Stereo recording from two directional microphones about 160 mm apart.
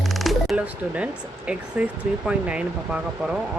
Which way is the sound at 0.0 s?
Centre (ahead or behind).